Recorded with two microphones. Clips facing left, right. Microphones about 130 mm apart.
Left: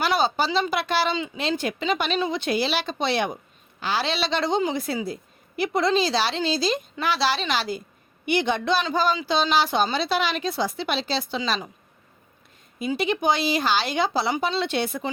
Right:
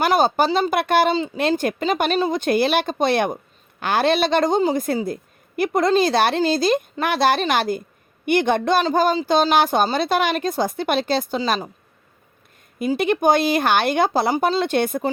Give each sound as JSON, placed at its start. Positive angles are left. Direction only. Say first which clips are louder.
{"t": 0.0, "sound": "a woman's voice", "louder": "right 5 dB", "side_deg": -50}
{"t": 13.0, "sound": "a woman's voice", "louder": "right 6 dB", "side_deg": -50}